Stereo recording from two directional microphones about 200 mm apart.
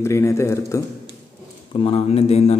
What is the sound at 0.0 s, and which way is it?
Speech, 15° left (ahead or behind).